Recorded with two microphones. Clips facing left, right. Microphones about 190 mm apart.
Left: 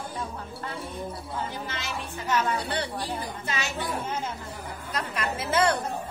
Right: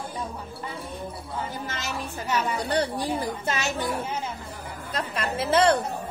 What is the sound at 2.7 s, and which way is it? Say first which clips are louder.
A woman's voice: right 5 dB; 45° right (ahead or behind).